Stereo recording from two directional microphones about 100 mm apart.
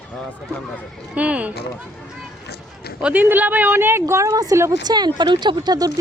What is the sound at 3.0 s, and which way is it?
Speech, 20° right (ahead or behind).